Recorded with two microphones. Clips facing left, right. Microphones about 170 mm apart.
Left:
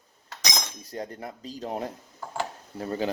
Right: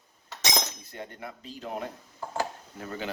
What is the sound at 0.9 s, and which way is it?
Speech, 35° left (ahead or behind).